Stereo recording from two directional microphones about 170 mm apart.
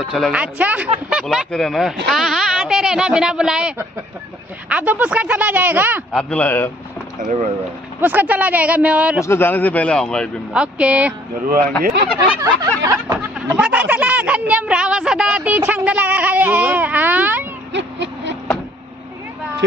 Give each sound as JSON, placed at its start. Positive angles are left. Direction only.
{"t": 0.0, "sound": "speech", "side_deg": 0}
{"t": 6.1, "sound": "a man's voice", "side_deg": 10}
{"t": 7.2, "sound": "speech", "side_deg": -45}
{"t": 8.0, "sound": "speech", "side_deg": -10}
{"t": 9.2, "sound": "a man's voice", "side_deg": 15}
{"t": 10.5, "sound": "speech", "side_deg": -5}
{"t": 11.8, "sound": "speech", "side_deg": -65}
{"t": 12.2, "sound": "a sound", "side_deg": -20}
{"t": 17.7, "sound": "a sound", "side_deg": -90}